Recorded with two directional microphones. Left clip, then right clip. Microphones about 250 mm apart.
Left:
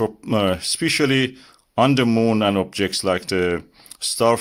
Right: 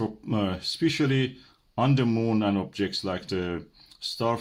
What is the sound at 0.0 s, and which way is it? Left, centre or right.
Speech, left.